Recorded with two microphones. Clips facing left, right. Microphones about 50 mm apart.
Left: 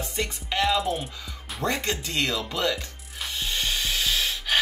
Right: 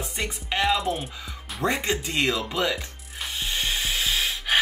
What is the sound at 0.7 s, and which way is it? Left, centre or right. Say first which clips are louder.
Music: even; centre.